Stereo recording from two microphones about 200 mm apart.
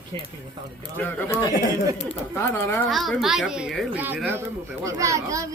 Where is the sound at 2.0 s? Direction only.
15° left (ahead or behind).